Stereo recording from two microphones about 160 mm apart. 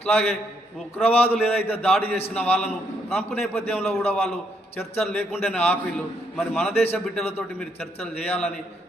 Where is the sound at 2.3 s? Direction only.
10° left (ahead or behind).